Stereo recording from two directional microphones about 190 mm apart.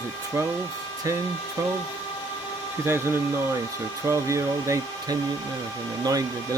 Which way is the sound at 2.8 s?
10° right (ahead or behind).